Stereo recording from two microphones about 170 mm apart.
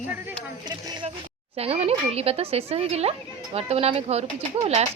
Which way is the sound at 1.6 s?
35° right (ahead or behind).